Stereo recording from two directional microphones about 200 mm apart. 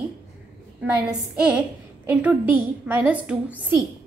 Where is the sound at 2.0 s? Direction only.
10° right (ahead or behind).